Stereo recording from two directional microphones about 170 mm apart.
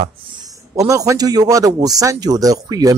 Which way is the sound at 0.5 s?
20° right (ahead or behind).